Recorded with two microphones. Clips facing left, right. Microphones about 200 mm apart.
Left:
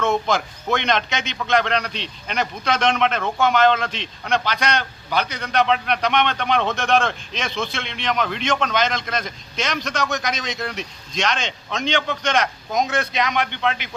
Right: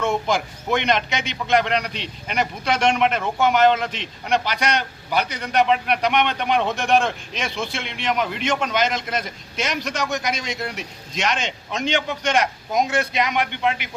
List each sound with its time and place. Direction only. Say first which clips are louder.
0.0 s a man's voice: left 1 dB; 15° right (ahead or behind)